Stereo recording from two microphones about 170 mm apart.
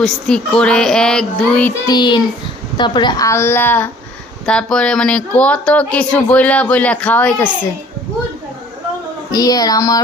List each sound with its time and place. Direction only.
0.0 s a sound: 5° left (ahead or behind)
1.9 s child singing: 25° left (ahead or behind)
2.7 s speech: 25° left (ahead or behind); by 7.5 s 10° left (ahead or behind)
9.3 s child singing: 20° left (ahead or behind)